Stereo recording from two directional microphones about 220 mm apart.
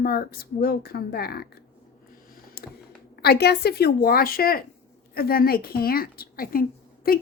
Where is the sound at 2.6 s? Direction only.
45° left (ahead or behind).